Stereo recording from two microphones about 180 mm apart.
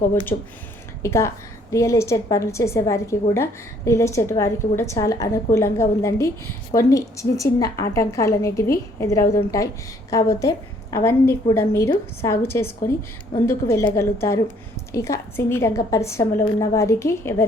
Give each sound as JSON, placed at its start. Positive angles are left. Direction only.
{"t": 0.3, "sound": "speech", "side_deg": 35}
{"t": 1.0, "sound": "a woman's voice", "side_deg": 15}